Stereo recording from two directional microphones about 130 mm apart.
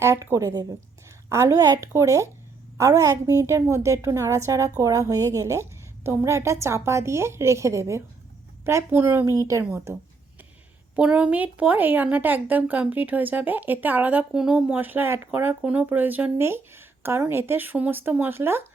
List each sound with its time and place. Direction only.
0.0 s a woman's voice: 20° right (ahead or behind)
10.9 s a woman's voice: 10° right (ahead or behind)